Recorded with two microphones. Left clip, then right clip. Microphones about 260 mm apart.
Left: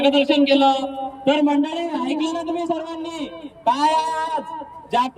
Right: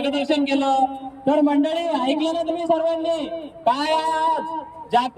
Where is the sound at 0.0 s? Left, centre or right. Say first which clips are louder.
Left 5 dB; centre.